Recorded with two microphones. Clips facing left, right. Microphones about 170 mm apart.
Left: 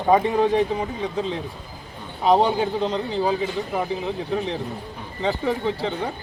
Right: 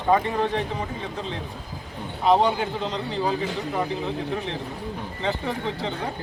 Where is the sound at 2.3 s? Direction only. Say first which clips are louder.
Left 2 dB; 15° left (ahead or behind).